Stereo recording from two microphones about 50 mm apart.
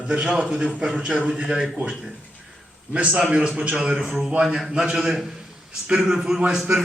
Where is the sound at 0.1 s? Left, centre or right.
Centre.